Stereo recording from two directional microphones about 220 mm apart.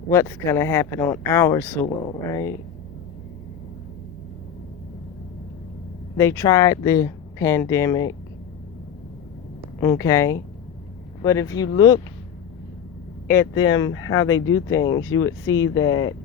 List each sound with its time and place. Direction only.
0.1 s speech: 15° left (ahead or behind)
6.1 s speech: 10° left (ahead or behind)
9.8 s speech: 15° left (ahead or behind)
13.2 s speech: 50° left (ahead or behind); by 14.6 s 70° left (ahead or behind)
14.7 s speech: 15° left (ahead or behind)
15.6 s speech: 65° left (ahead or behind)